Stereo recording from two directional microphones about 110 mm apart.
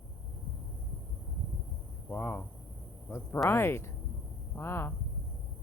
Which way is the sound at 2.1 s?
20° left (ahead or behind).